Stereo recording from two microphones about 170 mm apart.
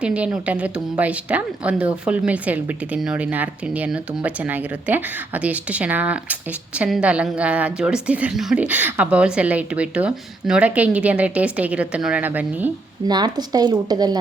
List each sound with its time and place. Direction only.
0.0 s a woman's voice: 5° right (ahead or behind)
13.1 s speech: 25° right (ahead or behind)